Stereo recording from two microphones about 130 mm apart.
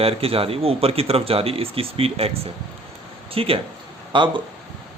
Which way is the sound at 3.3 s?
45° right (ahead or behind).